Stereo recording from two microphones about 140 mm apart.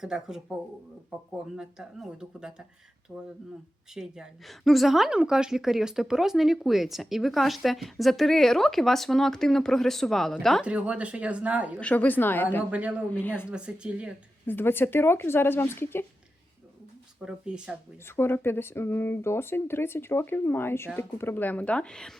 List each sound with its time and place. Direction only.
0.0 s a woman's voice: 5° right (ahead or behind)
3.9 s a woman's voice: 5° right (ahead or behind)
11.8 s speech: 10° left (ahead or behind)
12.7 s speech: 10° right (ahead or behind)
13.1 s speech: 15° left (ahead or behind)
13.5 s speech: 5° right (ahead or behind)
14.4 s speech: 15° left (ahead or behind)
17.2 s a woman's voice: 5° right (ahead or behind)
18.2 s speech: 15° left (ahead or behind)